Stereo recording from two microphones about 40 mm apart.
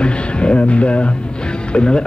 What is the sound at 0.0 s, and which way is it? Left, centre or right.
Music, left.